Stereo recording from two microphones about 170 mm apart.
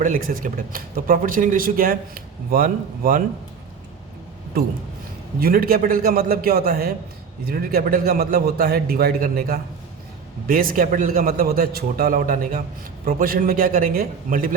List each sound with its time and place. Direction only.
0.0 s speech: 50° right (ahead or behind)
5.4 s a man's voice: 60° right (ahead or behind)